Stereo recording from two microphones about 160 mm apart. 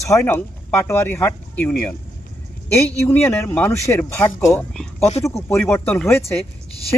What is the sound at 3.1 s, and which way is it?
Speech, 10° left (ahead or behind).